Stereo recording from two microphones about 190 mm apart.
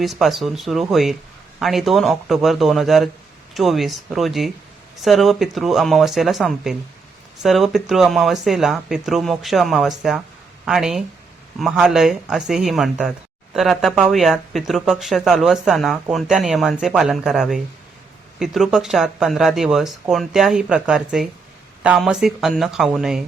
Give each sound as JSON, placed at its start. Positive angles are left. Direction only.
{"t": 0.0, "sound": "speech", "side_deg": 0}